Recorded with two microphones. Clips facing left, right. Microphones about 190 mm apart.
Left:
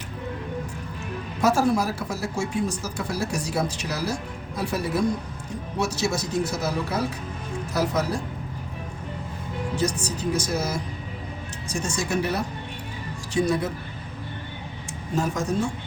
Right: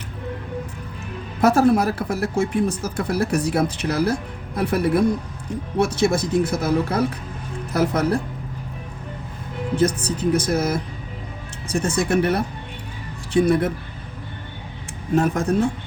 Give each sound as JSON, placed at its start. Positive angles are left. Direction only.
{"t": 1.4, "sound": "speech", "side_deg": -60}
{"t": 9.7, "sound": "speech", "side_deg": -55}
{"t": 15.1, "sound": "speech", "side_deg": -55}